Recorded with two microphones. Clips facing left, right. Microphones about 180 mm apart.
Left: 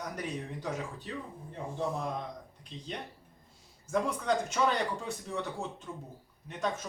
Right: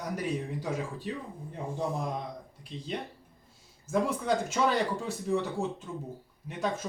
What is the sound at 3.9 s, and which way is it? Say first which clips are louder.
Speech: right 2 dB; 5° right (ahead or behind).